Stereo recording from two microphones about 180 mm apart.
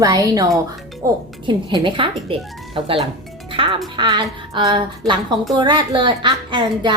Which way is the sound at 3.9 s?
25° right (ahead or behind).